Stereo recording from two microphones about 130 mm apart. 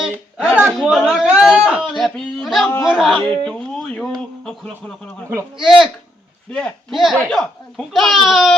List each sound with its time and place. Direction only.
0.0 s speech: 10° right (ahead or behind)
2.6 s speech: 15° left (ahead or behind)
2.9 s speech: centre (ahead or behind)
5.5 s speech: centre (ahead or behind)